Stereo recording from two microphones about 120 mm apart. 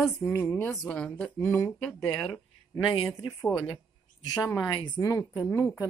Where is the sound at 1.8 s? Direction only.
5° left (ahead or behind).